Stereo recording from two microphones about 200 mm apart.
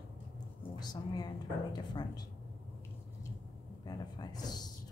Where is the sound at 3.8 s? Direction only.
20° left (ahead or behind).